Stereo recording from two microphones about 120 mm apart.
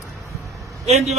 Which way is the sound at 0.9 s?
65° right (ahead or behind).